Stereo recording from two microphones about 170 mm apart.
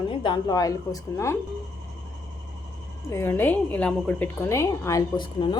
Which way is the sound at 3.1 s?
15° left (ahead or behind).